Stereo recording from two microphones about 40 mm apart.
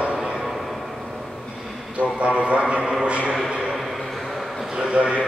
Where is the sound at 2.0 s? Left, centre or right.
Right.